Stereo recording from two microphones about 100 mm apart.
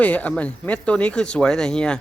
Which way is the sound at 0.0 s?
15° left (ahead or behind).